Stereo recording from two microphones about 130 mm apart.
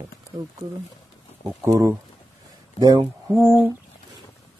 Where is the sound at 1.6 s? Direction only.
20° right (ahead or behind).